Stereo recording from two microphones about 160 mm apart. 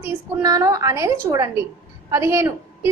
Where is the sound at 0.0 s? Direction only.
20° right (ahead or behind).